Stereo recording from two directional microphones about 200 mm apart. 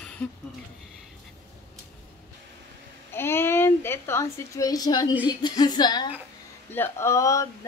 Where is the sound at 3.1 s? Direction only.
10° left (ahead or behind).